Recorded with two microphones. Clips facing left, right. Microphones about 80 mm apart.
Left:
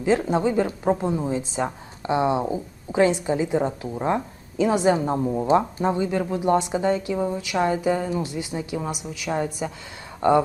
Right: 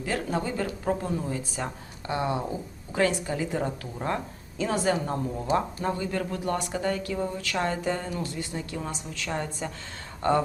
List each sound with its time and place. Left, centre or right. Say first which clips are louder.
0.0 s a woman's voice: left 8 dB; centre